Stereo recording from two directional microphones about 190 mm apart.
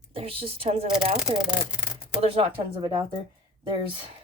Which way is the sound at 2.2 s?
30° right (ahead or behind).